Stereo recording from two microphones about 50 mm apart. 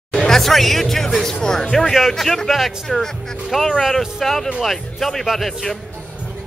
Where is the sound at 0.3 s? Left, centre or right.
Centre.